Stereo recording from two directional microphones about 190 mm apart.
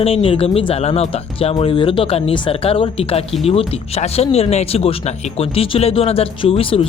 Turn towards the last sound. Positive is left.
turn(degrees=30)  # may be behind; listen again after turning